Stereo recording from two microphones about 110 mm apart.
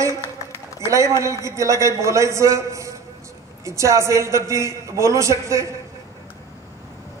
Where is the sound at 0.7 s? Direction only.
30° right (ahead or behind).